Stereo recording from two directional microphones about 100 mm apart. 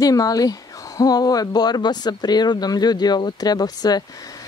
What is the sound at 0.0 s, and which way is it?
Speech, 35° left (ahead or behind).